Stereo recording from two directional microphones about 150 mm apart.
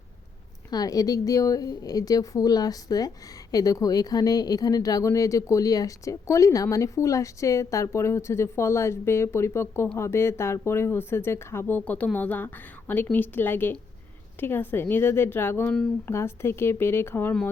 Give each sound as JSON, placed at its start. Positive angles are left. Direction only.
{"t": 0.7, "sound": "speech", "side_deg": 25}